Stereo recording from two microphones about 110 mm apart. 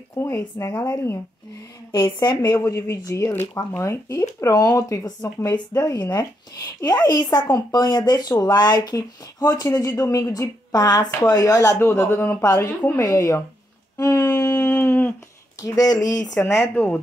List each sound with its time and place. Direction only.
0.2 s speech: 25° left (ahead or behind)
2.1 s speech: 35° left (ahead or behind)
13.9 s a sound: 30° left (ahead or behind)
15.6 s speech: 35° left (ahead or behind)
16.4 s speech: 20° left (ahead or behind)